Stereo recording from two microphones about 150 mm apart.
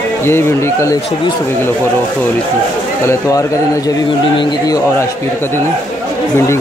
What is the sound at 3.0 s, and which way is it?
A man's voice, 20° left (ahead or behind).